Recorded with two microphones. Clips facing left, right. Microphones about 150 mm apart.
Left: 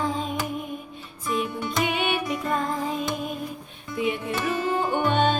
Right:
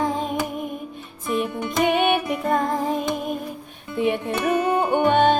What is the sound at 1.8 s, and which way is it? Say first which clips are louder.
Music: right 7 dB; 50° right (ahead or behind).